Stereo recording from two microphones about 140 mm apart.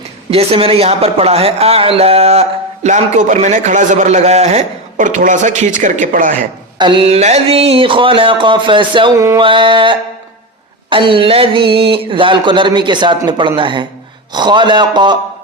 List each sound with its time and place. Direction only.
0.3 s a man's voice: 45° right (ahead or behind); by 6.5 s 80° right
6.7 s speech: 35° right (ahead or behind)
9.1 s music: 20° right (ahead or behind)
9.4 s speech: 35° right (ahead or behind)